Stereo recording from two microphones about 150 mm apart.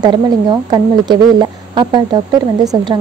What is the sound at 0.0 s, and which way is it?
Speech, 30° right (ahead or behind).